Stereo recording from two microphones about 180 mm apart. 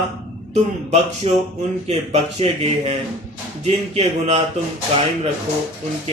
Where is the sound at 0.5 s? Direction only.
35° right (ahead or behind).